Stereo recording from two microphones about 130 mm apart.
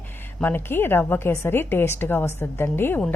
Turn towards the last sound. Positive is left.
turn(degrees=15)  # may be behind; listen again after turning